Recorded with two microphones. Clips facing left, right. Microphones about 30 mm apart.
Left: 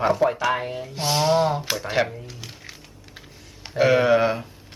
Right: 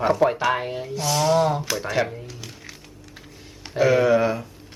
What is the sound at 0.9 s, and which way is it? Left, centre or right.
Speech, left.